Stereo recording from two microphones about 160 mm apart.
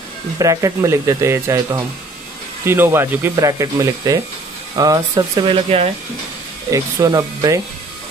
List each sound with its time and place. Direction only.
0.4 s speech: 20° right (ahead or behind); by 5.9 s 35° right (ahead or behind)
6.7 s speech: 20° right (ahead or behind)